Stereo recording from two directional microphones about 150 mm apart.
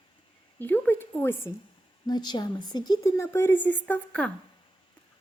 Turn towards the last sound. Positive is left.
turn(degrees=10)  # may be behind; listen again after turning